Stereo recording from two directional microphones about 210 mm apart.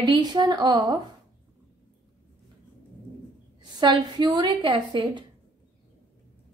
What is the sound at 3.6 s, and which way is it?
A woman's voice, 20° right (ahead or behind).